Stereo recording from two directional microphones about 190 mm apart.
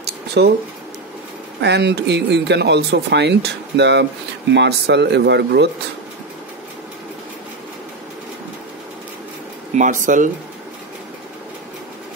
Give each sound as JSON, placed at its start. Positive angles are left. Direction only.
{"t": 0.0, "sound": "a sound", "side_deg": -60}
{"t": 1.6, "sound": "speech", "side_deg": -60}
{"t": 9.8, "sound": "speech", "side_deg": -40}